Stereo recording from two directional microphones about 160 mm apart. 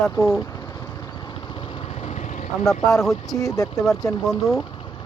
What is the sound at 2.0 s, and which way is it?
Vehicle, 45° left (ahead or behind).